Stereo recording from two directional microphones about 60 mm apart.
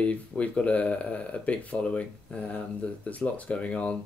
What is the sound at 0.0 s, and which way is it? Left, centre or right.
Speech, left.